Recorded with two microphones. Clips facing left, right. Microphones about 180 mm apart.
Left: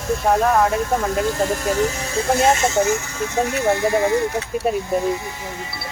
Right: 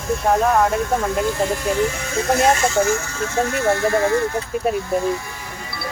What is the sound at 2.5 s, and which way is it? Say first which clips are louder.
Speech: even; 20° left (ahead or behind).